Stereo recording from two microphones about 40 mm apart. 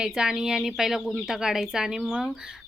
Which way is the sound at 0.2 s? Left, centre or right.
Centre.